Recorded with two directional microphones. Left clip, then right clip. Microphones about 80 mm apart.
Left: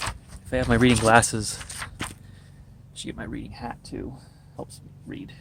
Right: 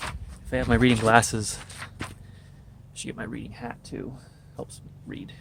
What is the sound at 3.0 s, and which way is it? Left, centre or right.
Speech, right.